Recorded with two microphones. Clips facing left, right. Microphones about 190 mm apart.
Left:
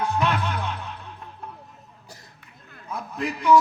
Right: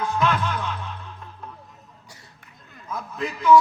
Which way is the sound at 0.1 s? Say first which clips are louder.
Right 1 dB; 30° left (ahead or behind).